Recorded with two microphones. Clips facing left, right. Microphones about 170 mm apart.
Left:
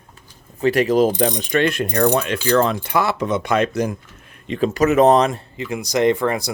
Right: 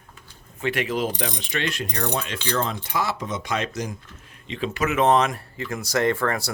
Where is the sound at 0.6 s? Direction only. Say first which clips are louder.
Left 9 dB; 40° left (ahead or behind); by 2.3 s 65° left (ahead or behind).